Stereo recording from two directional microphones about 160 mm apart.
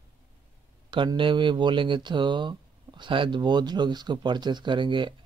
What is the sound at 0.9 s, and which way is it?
Speech, 30° right (ahead or behind).